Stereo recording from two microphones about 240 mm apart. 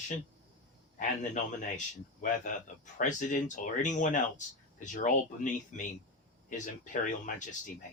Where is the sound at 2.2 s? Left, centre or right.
Left.